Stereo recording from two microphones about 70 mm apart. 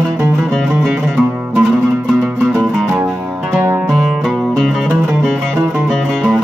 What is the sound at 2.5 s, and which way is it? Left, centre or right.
Music, centre.